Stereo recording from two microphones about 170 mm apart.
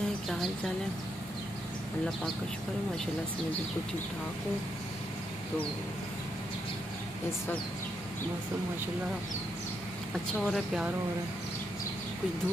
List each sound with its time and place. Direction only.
10.4 s speech: 5° right (ahead or behind)